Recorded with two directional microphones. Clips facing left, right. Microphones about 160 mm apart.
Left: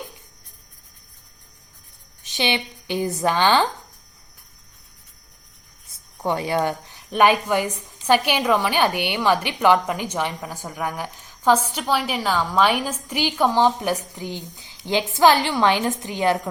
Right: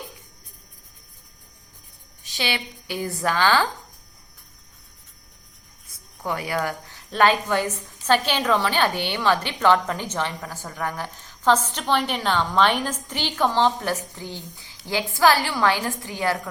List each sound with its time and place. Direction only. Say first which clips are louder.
2.2 s speech: left 4 dB; 20° left (ahead or behind)
6.1 s a woman's voice: left 4 dB; 25° left (ahead or behind)